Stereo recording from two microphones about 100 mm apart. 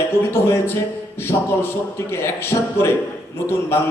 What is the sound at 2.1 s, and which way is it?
Speech, 25° left (ahead or behind).